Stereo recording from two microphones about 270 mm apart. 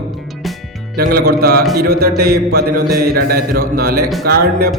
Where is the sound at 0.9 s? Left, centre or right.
Right.